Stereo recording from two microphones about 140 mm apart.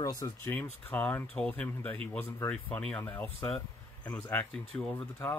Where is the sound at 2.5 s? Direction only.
10° left (ahead or behind).